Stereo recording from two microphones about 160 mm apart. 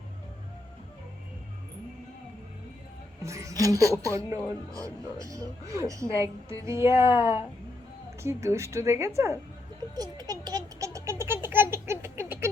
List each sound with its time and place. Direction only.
3.2 s a woman's voice: 20° right (ahead or behind)
6.9 s speech: 35° left (ahead or behind)
8.2 s speech: 15° right (ahead or behind)
9.9 s a sound: 25° right (ahead or behind)